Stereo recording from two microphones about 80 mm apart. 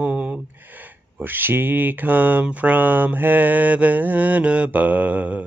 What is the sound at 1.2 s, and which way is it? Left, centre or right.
Speech, right.